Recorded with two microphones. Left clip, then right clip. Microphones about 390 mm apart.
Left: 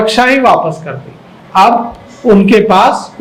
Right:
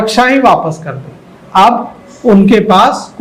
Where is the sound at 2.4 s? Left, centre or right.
Right.